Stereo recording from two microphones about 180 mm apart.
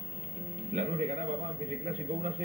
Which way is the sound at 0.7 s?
40° right (ahead or behind).